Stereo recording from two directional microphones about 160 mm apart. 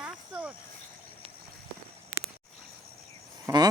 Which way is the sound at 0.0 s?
5° right (ahead or behind).